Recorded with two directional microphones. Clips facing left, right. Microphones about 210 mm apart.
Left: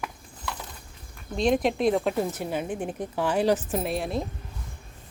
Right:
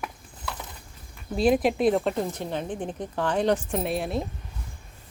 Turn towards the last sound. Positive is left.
turn(degrees=0)  # may be behind; listen again after turning